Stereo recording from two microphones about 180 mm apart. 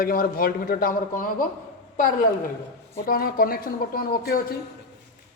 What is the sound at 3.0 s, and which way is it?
Speech, 55° left (ahead or behind).